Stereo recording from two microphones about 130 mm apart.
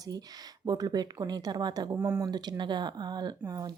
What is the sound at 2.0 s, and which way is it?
Speech, 15° right (ahead or behind).